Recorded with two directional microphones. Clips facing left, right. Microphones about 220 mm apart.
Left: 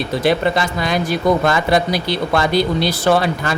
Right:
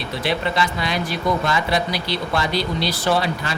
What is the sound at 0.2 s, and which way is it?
Speech, 45° left (ahead or behind).